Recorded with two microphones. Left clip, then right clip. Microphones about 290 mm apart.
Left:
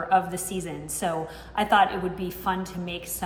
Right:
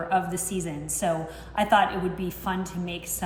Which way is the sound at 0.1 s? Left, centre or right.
Centre.